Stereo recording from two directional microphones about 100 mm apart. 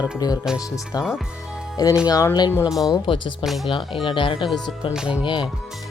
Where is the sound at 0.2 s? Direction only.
40° left (ahead or behind).